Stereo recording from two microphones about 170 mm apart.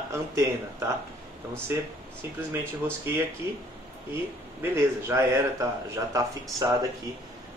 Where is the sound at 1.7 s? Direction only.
15° right (ahead or behind).